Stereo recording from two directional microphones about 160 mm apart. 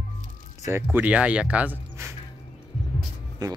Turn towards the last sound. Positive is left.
turn(degrees=-25)  # may be behind; listen again after turning